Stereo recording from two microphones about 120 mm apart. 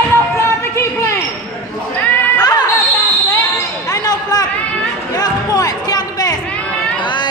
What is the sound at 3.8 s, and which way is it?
Basketball bounce, 30° left (ahead or behind).